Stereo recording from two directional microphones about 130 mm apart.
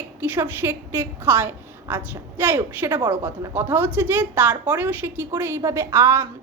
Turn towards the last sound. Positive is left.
turn(degrees=-20)  # may be behind; listen again after turning